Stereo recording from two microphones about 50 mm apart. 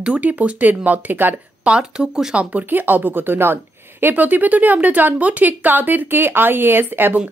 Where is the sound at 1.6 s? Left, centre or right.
Centre.